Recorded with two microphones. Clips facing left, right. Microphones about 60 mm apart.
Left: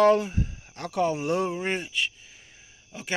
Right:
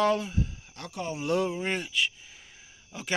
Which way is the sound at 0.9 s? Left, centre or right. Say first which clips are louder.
Left 10 dB; left.